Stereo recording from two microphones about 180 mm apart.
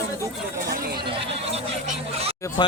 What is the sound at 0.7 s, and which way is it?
Speech, 55° right (ahead or behind).